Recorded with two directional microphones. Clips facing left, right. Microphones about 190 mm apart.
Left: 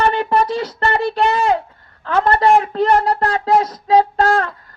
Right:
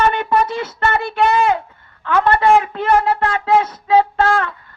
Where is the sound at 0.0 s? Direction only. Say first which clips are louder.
Even; 35° left (ahead or behind).